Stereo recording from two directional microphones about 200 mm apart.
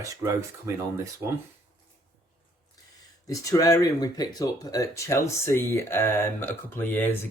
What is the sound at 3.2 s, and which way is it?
Speech, 15° left (ahead or behind).